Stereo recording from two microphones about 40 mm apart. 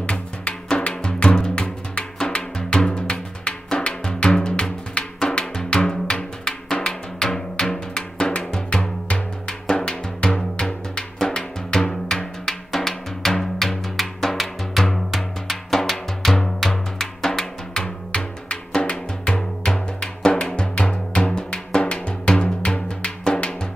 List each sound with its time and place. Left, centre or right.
0.0 s music: left
5.2 s drum: left
6.4 s music: centre
15.1 s drum: centre
16.5 s music: centre; by 23.5 s left